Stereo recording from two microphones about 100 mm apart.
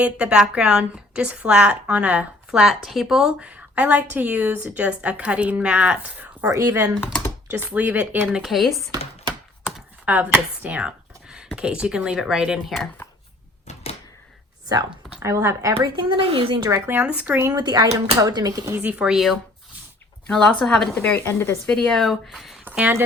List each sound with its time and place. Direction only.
0.0 s a woman's voice: 15° right (ahead or behind)
6.4 s speech: 35° right (ahead or behind)
7.5 s a woman's voice: 20° right (ahead or behind)
8.3 s speech: 5° right (ahead or behind)
9.6 s speech: 15° right (ahead or behind); by 12.9 s centre (ahead or behind)
15.2 s speech: 30° right (ahead or behind)
15.8 s speech: 50° right (ahead or behind); by 16.6 s 70° right (ahead or behind)
16.6 s a woman's voice: 25° right (ahead or behind)
17.5 s speech: 40° right (ahead or behind)
18.7 s a woman's voice: 15° right (ahead or behind)
20.2 s speech: 10° left (ahead or behind)
21.2 s a woman's voice: 25° left (ahead or behind)
21.7 s speech: 5° left (ahead or behind)
22.6 s speech: 15° right (ahead or behind)